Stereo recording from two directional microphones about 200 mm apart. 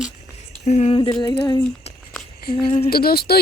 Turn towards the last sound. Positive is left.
turn(degrees=50)  # may be behind; listen again after turning